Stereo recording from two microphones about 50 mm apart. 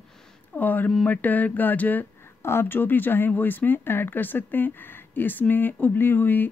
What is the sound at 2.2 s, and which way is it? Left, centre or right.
Speech, left.